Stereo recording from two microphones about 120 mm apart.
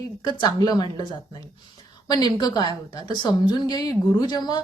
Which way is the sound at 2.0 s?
35° left (ahead or behind).